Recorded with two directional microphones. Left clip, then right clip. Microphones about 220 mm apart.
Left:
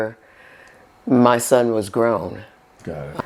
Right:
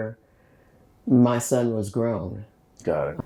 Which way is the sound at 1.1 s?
20° left (ahead or behind).